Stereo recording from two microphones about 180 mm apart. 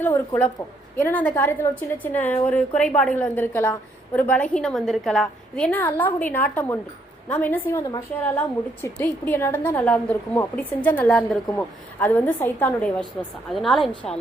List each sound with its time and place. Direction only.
0.0 s a woman's voice: 10° left (ahead or behind)